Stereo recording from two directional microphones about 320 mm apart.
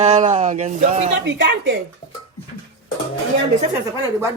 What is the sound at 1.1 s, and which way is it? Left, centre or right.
Speech, right.